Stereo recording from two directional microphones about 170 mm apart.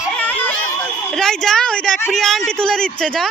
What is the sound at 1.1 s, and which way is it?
A woman's voice, 5° left (ahead or behind).